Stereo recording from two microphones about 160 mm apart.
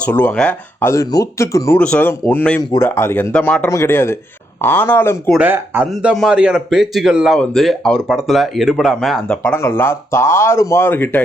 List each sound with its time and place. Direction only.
0.0 s speech: 10° left (ahead or behind)
5.4 s a man's voice: 10° right (ahead or behind); by 11.2 s 15° left (ahead or behind)